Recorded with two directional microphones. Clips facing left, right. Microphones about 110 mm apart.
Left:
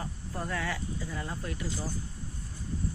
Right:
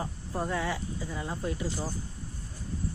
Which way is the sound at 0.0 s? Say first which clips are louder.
Right 4 dB; 25° right (ahead or behind).